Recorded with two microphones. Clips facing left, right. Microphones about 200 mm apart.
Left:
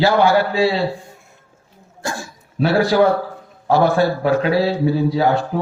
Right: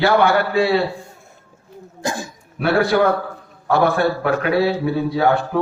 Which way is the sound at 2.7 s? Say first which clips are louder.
Left 1 dB; 55° right (ahead or behind).